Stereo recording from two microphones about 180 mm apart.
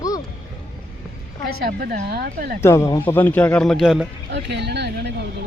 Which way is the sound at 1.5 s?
55° right (ahead or behind).